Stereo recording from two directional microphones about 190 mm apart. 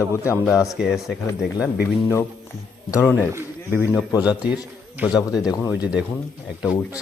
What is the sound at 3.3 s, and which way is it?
A man's voice, 15° right (ahead or behind).